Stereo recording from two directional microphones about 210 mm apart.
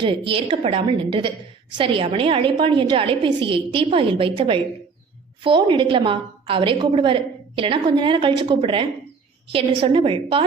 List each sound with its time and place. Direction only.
0.0 s a woman's voice: 25° right (ahead or behind)